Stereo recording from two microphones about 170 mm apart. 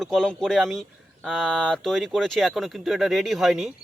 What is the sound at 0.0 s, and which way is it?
Speech, centre (ahead or behind).